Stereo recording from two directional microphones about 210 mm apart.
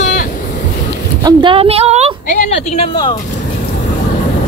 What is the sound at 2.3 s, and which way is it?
Speech, 30° left (ahead or behind).